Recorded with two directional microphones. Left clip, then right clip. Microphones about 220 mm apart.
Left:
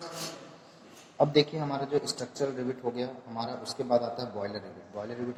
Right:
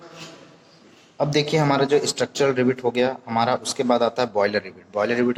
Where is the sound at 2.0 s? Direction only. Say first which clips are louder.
Right 12 dB; 30° right (ahead or behind).